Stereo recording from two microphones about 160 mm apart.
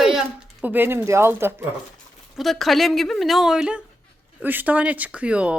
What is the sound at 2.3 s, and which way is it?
Speech, centre (ahead or behind).